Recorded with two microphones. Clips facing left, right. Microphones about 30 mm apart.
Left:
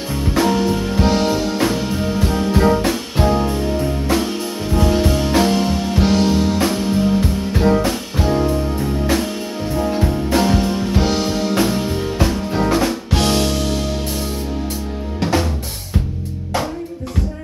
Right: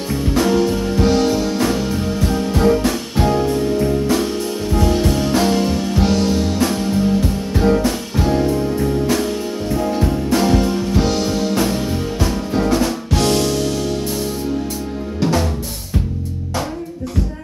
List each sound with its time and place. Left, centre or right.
0.3 s music: centre
9.8 s music: centre